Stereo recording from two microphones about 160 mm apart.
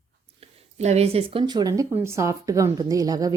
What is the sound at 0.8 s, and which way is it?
Speech, 45° right (ahead or behind).